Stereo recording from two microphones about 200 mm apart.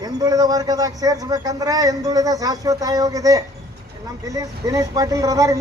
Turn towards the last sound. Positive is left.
turn(degrees=-15)  # may be behind; listen again after turning